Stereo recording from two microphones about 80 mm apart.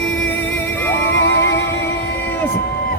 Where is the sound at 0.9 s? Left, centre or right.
Left.